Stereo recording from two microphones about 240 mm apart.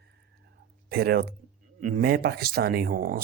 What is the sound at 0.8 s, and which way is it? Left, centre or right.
Speech, right.